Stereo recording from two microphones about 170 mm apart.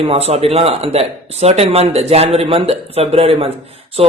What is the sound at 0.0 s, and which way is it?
Speech, 35° right (ahead or behind).